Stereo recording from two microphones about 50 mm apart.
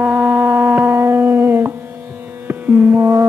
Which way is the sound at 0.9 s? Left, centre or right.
Right.